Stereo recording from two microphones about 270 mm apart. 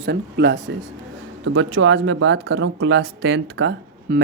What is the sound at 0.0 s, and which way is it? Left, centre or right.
Speech, right.